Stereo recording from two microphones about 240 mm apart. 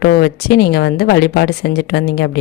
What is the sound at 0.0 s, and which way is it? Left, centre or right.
Speech, left.